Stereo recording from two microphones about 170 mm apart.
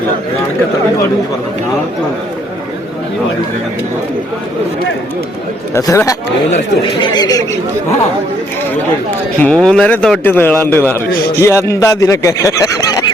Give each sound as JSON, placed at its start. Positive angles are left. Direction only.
{"t": 5.7, "sound": "a man's voice", "side_deg": 15}
{"t": 9.4, "sound": "a man's voice", "side_deg": 5}